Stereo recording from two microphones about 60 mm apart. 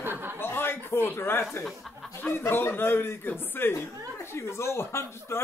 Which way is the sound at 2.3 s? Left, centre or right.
Left.